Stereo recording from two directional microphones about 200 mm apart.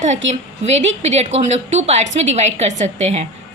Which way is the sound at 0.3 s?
35° right (ahead or behind).